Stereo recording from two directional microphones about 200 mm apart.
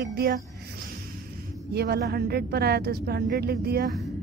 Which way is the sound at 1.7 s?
55° right (ahead or behind).